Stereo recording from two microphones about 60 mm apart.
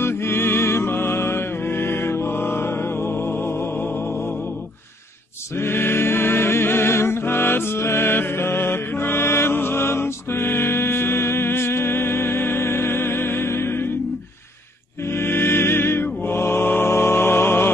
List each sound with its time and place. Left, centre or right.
0.0 s music: left
5.6 s music: left
15.1 s mantra: left